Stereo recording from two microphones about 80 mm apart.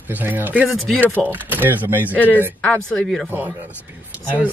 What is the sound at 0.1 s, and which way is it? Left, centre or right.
Speech, right.